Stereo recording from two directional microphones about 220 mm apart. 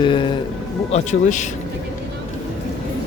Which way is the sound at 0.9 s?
30° left (ahead or behind).